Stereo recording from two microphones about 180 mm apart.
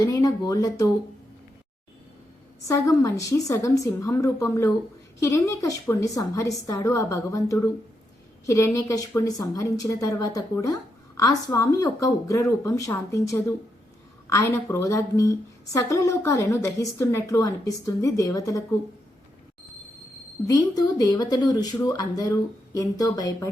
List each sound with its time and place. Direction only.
0.0 s speech: 20° left (ahead or behind)
2.6 s a woman's voice: 20° left (ahead or behind)
20.5 s speech: 20° left (ahead or behind)